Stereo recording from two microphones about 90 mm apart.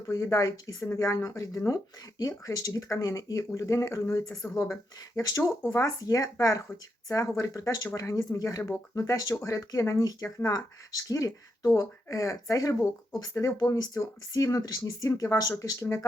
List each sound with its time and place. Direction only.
0.1 s speech: 35° left (ahead or behind)